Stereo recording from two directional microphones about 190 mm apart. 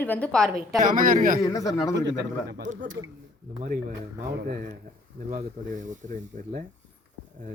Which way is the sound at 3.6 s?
40° right (ahead or behind).